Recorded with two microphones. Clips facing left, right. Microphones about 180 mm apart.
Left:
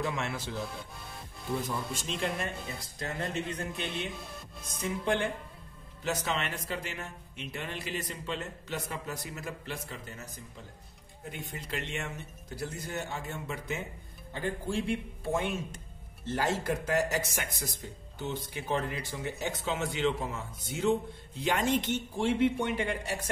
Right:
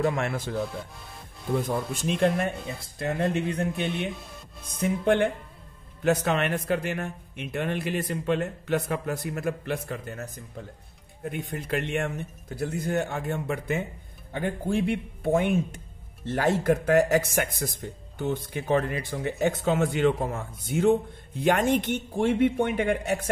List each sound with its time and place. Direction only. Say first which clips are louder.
0.0 s speech: right 7 dB; 50° right (ahead or behind)